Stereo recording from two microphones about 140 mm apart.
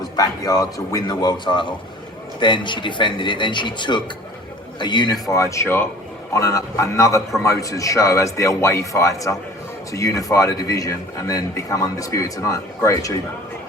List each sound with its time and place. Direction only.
0.2 s a man's voice: 25° left (ahead or behind)
5.2 s a man's voice: 20° left (ahead or behind)